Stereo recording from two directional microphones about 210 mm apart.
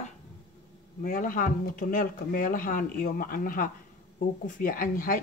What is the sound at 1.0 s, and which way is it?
Speech, 40° left (ahead or behind).